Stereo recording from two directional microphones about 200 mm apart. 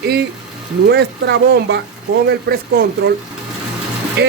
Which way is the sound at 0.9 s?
55° right (ahead or behind).